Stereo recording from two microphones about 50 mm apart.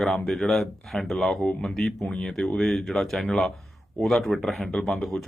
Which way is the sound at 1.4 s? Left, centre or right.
Centre.